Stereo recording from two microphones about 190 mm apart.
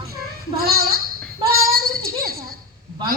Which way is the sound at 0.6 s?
55° right (ahead or behind).